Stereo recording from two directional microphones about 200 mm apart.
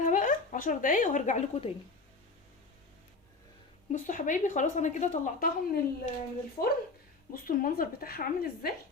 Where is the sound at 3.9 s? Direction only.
40° left (ahead or behind).